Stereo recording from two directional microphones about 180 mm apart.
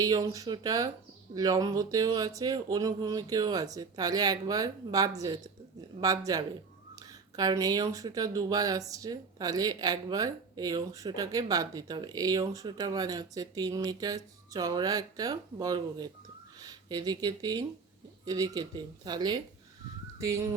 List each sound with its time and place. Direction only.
0.0 s speech: 20° right (ahead or behind)
20.1 s fowl: 20° right (ahead or behind)